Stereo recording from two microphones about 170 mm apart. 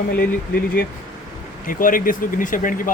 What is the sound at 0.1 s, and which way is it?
Speech, 60° left (ahead or behind).